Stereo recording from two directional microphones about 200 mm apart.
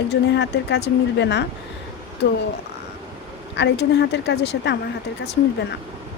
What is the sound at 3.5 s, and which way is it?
A woman's voice, 60° left (ahead or behind).